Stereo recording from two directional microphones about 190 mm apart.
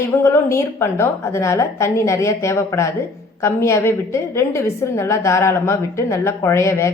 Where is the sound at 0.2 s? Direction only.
15° left (ahead or behind).